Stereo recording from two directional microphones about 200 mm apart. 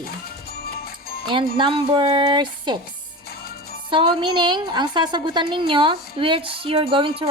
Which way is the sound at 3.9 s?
25° right (ahead or behind).